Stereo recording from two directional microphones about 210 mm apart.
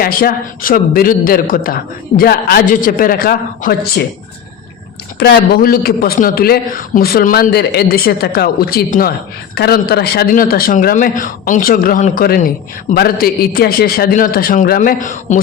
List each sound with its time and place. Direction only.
0.0 s speech: 45° left (ahead or behind)
5.2 s speech: 50° left (ahead or behind)